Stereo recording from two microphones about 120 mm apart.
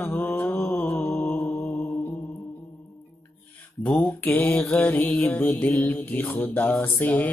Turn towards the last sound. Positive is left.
turn(degrees=15)  # may be behind; listen again after turning